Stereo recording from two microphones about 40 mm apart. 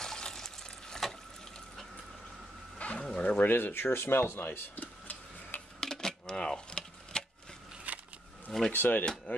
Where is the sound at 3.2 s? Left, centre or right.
Left.